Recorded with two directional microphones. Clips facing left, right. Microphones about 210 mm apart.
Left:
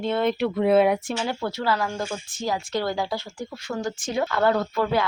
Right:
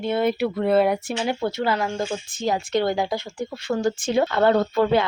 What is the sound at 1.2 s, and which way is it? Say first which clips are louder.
Speech: right 3 dB; 20° right (ahead or behind).